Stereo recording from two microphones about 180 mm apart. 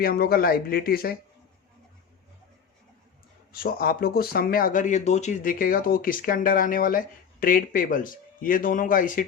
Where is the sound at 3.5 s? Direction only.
55° left (ahead or behind).